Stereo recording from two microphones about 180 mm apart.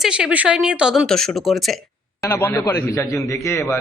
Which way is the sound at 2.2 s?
10° left (ahead or behind).